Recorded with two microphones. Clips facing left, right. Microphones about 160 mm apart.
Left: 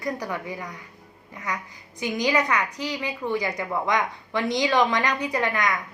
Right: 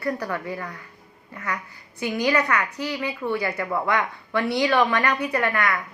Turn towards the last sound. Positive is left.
turn(degrees=15)  # may be behind; listen again after turning